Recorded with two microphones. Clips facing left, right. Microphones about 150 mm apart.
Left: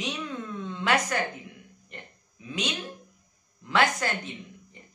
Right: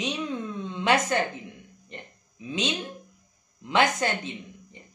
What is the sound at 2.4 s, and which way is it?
A woman's voice, 20° right (ahead or behind).